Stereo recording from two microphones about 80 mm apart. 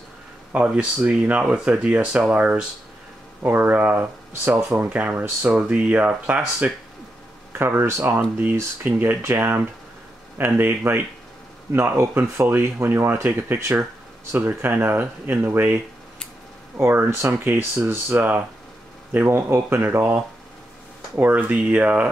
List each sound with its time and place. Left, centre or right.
0.5 s speech: centre
7.5 s speech: right
18.1 s speech: right